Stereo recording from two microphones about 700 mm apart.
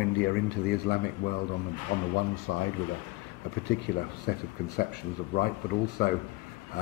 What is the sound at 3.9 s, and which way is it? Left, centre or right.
A man's voice, centre.